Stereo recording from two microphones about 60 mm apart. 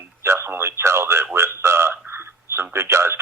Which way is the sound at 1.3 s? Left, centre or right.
Right.